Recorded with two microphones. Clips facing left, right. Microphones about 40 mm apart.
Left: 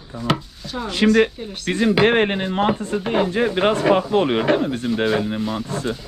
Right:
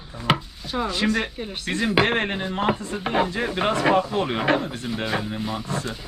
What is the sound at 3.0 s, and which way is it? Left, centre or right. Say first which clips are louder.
Speech: left 2 dB; centre.